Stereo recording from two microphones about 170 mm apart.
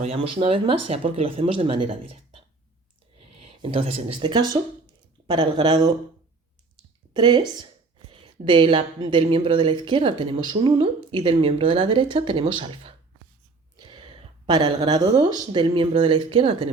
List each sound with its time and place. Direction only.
0.0 s speech: 35° right (ahead or behind)
3.4 s speech: 35° right (ahead or behind)
7.1 s a woman's voice: 25° right (ahead or behind)